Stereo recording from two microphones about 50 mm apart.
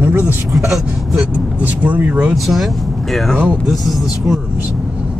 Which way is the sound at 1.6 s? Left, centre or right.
Right.